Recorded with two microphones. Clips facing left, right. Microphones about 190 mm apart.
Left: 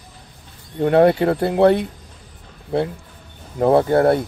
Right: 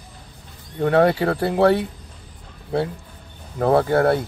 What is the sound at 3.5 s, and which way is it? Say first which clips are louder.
Speech: left 2 dB; 20° left (ahead or behind).